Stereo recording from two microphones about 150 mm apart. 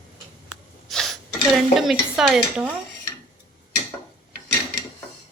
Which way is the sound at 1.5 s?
Centre (ahead or behind).